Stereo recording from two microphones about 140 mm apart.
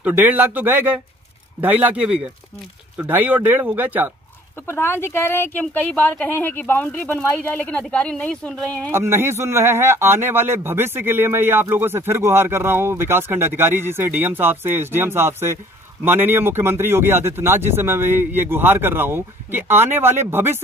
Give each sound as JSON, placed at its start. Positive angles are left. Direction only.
{"t": 0.0, "sound": "a man's voice", "side_deg": -10}
{"t": 4.6, "sound": "speech", "side_deg": 15}
{"t": 8.9, "sound": "a man's voice", "side_deg": -20}